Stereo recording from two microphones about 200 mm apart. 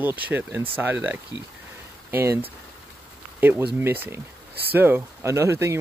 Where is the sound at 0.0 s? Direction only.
10° right (ahead or behind).